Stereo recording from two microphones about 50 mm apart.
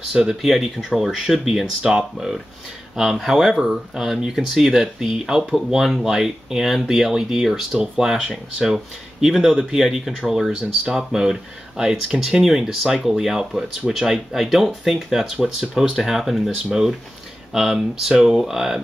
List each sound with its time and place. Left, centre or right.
0.1 s speech: centre
9.8 s speech: centre
10.6 s speech: centre
17.6 s speech: centre